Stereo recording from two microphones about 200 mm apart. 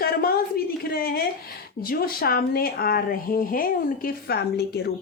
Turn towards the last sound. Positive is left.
turn(degrees=55)  # may be behind; listen again after turning